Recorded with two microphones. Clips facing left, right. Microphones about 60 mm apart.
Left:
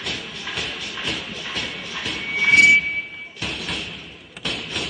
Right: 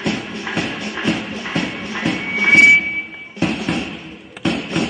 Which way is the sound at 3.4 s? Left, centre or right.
Right.